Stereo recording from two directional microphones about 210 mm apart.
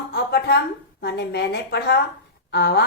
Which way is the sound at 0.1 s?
50° left (ahead or behind).